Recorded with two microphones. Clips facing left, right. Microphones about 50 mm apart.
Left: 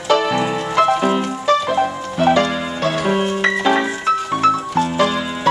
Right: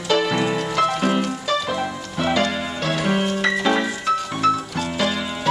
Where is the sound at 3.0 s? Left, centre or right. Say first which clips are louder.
Left 2 dB; centre.